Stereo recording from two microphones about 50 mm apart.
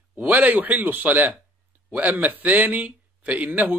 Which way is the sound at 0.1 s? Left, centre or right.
Right.